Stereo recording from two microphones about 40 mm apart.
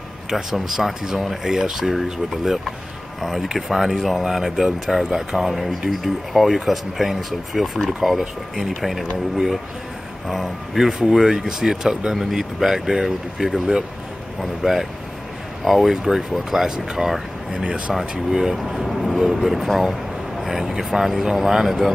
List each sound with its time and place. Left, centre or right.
0.3 s speech: centre
10.2 s speech: centre
12.2 s speech: centre
17.6 s speech: right
18.3 s speech: centre